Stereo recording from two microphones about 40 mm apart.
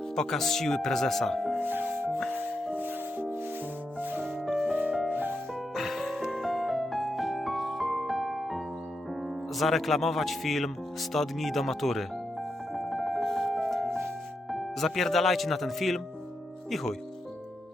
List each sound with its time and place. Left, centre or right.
0.2 s speech: centre
1.6 s music: right
4.2 s music: centre
9.6 s a man's voice: centre
12.7 s music: centre
14.5 s speech: centre